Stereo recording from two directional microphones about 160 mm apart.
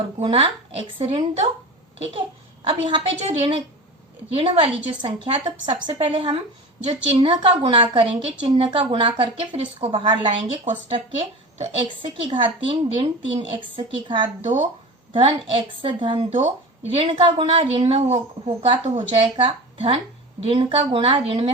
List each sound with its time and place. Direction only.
0.2 s a woman's voice: 35° right (ahead or behind)
2.6 s a woman's voice: 30° right (ahead or behind)